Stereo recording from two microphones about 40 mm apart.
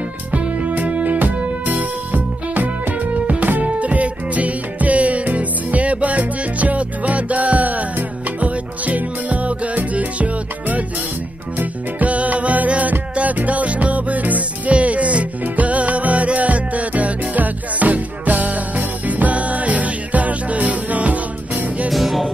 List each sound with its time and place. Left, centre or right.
0.3 s music: right
21.9 s music: centre